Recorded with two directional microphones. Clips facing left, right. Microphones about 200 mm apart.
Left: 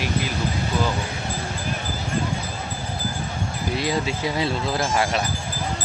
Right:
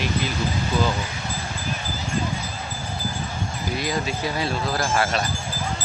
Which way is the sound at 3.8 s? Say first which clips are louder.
Left 2 dB; 25° left (ahead or behind).